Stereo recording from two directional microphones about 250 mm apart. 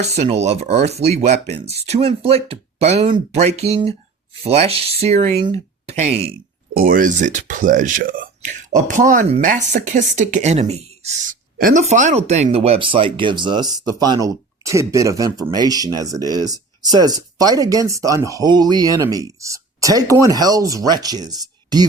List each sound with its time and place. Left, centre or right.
0.0 s speech: right